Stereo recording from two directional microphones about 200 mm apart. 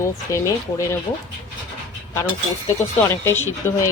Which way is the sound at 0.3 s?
15° left (ahead or behind).